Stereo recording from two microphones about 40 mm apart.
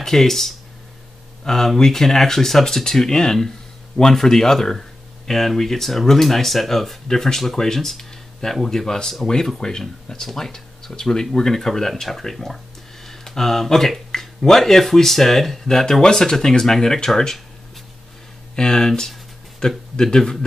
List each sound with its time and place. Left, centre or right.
0.0 s speech: centre
13.0 s a sound: centre
14.5 s speech: centre
18.5 s speech: centre